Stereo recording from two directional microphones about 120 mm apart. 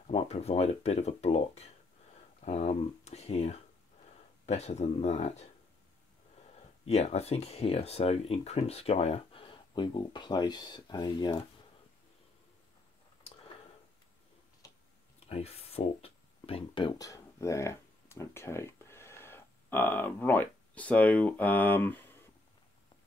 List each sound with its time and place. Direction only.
0.0 s speech: 60° left (ahead or behind)
6.9 s speech: 65° left (ahead or behind); by 11.4 s 35° left (ahead or behind)
15.1 s a sound: 55° left (ahead or behind)
17.0 s speech: 25° left (ahead or behind)